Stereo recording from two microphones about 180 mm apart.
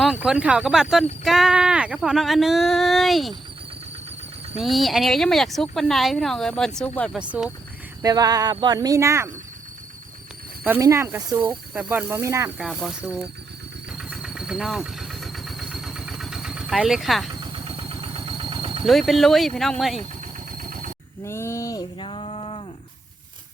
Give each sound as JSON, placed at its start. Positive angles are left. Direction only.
{"t": 0.0, "sound": "speech", "side_deg": -5}
{"t": 4.6, "sound": "speech", "side_deg": 0}
{"t": 8.0, "sound": "speech", "side_deg": -20}
{"t": 10.6, "sound": "speech", "side_deg": -15}
{"t": 12.5, "sound": "speech", "side_deg": 0}
{"t": 14.0, "sound": "vehicle", "side_deg": 0}
{"t": 17.4, "sound": "vehicle", "side_deg": -30}
{"t": 18.9, "sound": "speech", "side_deg": 0}
{"t": 20.0, "sound": "vehicle", "side_deg": -50}
{"t": 21.2, "sound": "a sound", "side_deg": 15}